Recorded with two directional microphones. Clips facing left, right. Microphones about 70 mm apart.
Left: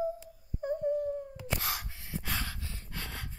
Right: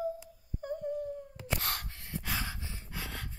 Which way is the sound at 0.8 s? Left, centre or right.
Centre.